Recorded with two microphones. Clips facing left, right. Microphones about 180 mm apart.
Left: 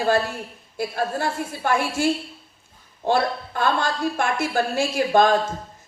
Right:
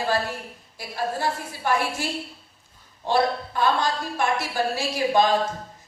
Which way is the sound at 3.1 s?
50° left (ahead or behind).